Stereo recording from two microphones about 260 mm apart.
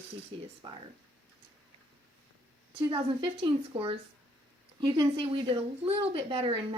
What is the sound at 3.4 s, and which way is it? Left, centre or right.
Speech, right.